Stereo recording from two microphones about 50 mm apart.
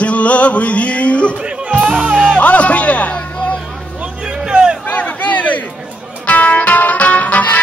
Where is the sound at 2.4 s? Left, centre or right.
Left.